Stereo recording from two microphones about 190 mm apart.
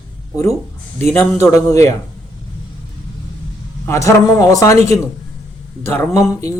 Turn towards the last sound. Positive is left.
turn(degrees=15)  # may be behind; listen again after turning